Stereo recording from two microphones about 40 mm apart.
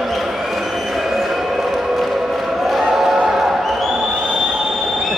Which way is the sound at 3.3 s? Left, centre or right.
Centre.